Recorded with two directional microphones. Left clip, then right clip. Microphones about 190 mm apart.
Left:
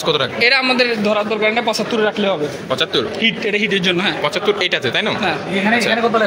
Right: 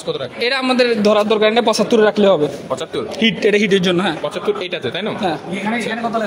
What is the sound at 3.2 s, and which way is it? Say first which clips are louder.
Speech: right 6 dB; 50° right (ahead or behind).